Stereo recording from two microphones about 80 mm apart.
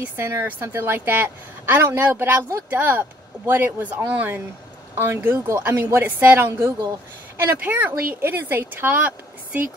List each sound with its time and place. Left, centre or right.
0.0 s speech: right